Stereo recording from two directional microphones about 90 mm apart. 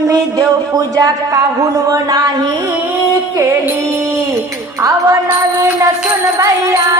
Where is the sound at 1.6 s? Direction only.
45° right (ahead or behind).